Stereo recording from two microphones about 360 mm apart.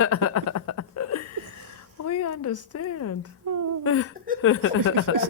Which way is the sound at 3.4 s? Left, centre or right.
Right.